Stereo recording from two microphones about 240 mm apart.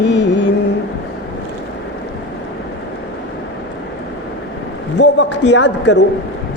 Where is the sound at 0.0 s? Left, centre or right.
Left.